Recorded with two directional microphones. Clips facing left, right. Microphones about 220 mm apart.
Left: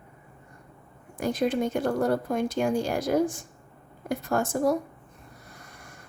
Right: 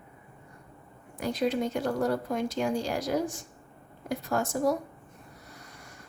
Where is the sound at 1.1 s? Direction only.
50° left (ahead or behind).